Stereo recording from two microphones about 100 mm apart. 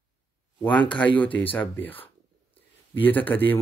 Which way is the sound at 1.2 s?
15° left (ahead or behind).